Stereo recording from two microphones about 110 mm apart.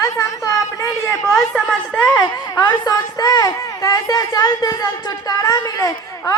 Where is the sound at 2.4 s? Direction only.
35° left (ahead or behind).